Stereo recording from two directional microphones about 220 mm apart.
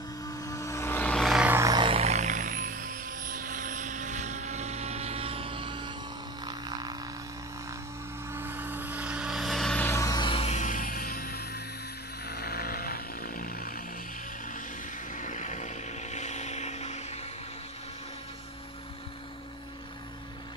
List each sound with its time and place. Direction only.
0.4 s vehicle: 15° left (ahead or behind); by 5.9 s 20° right (ahead or behind)
6.4 s a sound: 20° right (ahead or behind)
8.3 s vehicle: 10° right (ahead or behind); by 13.8 s 40° left (ahead or behind)
15.1 s vehicle: 35° left (ahead or behind)